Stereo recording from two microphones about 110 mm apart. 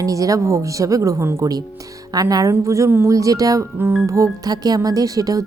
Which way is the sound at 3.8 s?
20° right (ahead or behind).